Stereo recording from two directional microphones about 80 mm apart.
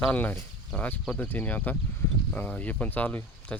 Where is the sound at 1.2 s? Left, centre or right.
Left.